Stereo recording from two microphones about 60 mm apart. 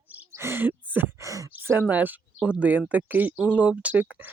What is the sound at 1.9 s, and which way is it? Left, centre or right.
Speech, right.